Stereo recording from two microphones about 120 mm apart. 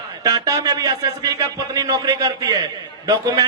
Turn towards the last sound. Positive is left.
turn(degrees=-35)  # may be behind; listen again after turning